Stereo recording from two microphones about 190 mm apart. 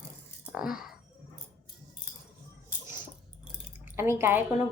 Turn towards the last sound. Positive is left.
turn(degrees=-10)  # may be behind; listen again after turning